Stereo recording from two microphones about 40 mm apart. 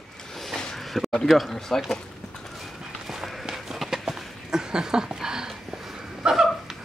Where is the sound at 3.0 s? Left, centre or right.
Centre.